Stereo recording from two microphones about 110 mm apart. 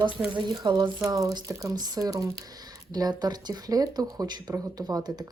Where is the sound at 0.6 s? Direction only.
40° right (ahead or behind).